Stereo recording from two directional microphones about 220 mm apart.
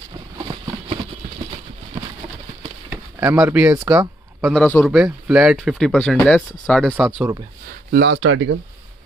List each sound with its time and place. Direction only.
3.2 s speech: 10° right (ahead or behind)
4.6 s speech: 5° left (ahead or behind)
7.9 s speech: 50° right (ahead or behind)
8.2 s speech: 65° right (ahead or behind)